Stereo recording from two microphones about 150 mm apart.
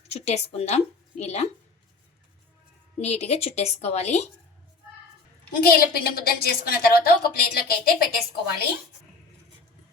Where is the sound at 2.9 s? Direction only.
45° left (ahead or behind).